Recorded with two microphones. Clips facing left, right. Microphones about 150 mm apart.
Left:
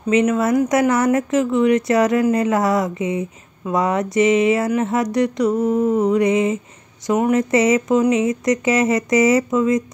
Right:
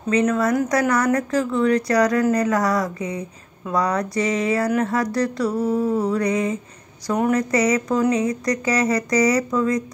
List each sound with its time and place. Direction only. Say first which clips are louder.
0.1 s speech: left 3 dB; 20° left (ahead or behind)